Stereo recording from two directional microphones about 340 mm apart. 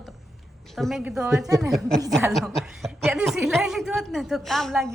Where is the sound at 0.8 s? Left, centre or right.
Centre.